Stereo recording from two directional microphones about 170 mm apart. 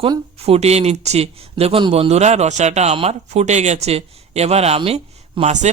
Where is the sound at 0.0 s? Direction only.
35° right (ahead or behind).